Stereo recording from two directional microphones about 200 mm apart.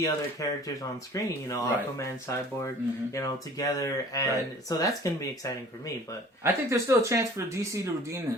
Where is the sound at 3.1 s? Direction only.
15° left (ahead or behind).